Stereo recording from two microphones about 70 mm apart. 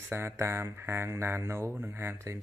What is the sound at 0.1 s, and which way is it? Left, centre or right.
Speech, right.